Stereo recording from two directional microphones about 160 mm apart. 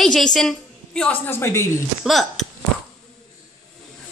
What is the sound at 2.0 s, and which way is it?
Speech, centre (ahead or behind).